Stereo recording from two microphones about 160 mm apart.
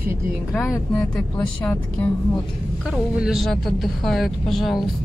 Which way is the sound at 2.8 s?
5° right (ahead or behind).